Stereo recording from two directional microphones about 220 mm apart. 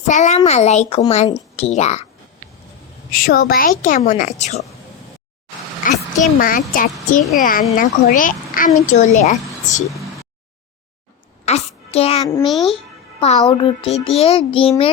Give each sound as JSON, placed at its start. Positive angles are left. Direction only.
{"t": 0.1, "sound": "speech", "side_deg": 30}
{"t": 3.1, "sound": "a child's voice", "side_deg": 40}
{"t": 5.8, "sound": "a child's voice", "side_deg": 40}
{"t": 9.9, "sound": "a sound", "side_deg": 0}
{"t": 11.4, "sound": "a child's voice", "side_deg": 30}
{"t": 12.5, "sound": "speech", "side_deg": 0}
{"t": 12.7, "sound": "music", "side_deg": 25}
{"t": 13.4, "sound": "speech", "side_deg": 20}